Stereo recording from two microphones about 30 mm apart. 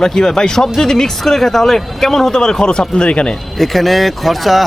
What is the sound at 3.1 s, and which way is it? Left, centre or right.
Speech, left.